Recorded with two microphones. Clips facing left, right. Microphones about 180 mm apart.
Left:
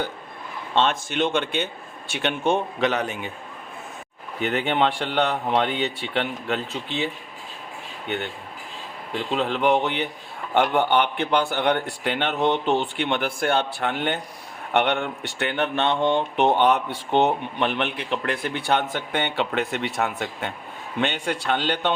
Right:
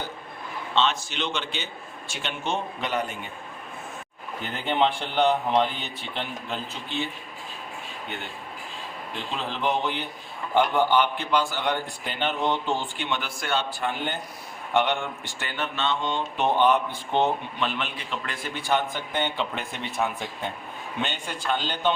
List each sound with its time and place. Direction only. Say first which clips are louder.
0.8 s speech: left 4 dB; 50° left (ahead or behind); by 3.2 s 75° left (ahead or behind)
4.4 s speech: left 3 dB; 70° left (ahead or behind)
9.3 s speech: left 6 dB; 65° left (ahead or behind)